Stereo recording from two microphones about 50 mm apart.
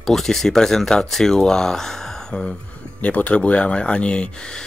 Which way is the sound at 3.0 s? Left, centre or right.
Left.